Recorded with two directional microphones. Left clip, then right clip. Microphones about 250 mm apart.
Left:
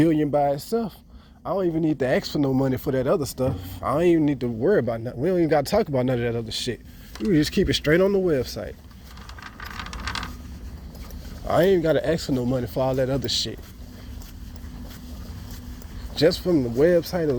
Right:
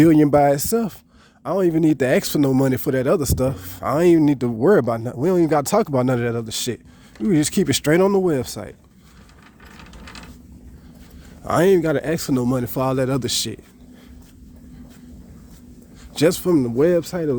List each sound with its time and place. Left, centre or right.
0.0 s speech: right
11.4 s speech: right
16.1 s speech: right